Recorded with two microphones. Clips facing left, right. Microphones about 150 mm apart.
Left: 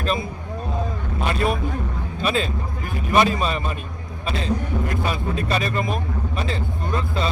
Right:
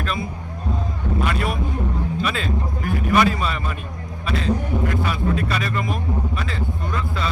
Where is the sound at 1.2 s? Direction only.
30° left (ahead or behind).